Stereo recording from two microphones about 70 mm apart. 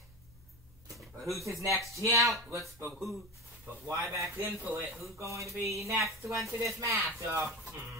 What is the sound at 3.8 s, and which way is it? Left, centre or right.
Speech, right.